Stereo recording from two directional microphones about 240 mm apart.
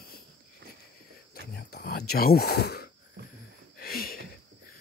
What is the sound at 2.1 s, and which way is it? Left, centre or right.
Speech, left.